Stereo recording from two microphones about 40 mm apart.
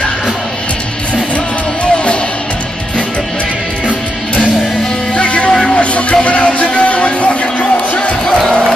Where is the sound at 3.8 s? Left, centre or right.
Left.